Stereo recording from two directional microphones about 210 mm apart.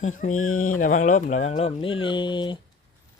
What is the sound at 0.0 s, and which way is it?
Speech, 35° left (ahead or behind).